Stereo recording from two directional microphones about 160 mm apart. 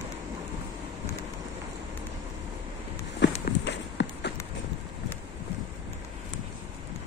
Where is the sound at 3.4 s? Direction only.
90° left.